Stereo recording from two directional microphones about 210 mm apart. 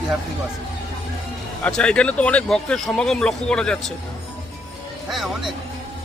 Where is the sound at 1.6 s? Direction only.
5° left (ahead or behind).